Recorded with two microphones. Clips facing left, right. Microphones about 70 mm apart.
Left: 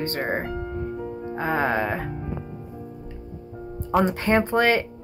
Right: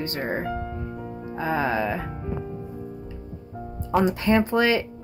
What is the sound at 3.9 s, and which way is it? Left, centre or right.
Speech, left.